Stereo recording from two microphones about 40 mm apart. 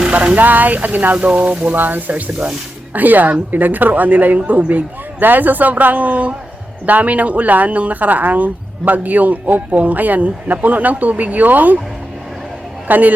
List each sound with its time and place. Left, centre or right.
0.1 s speech: right
0.3 s speech: right
1.1 s speech: right
1.7 s speech: right
12.9 s speech: right